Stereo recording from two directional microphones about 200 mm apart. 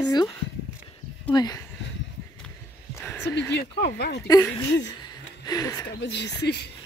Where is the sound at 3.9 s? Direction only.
55° left (ahead or behind).